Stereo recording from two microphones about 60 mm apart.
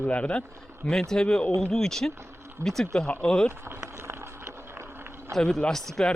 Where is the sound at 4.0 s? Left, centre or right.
Right.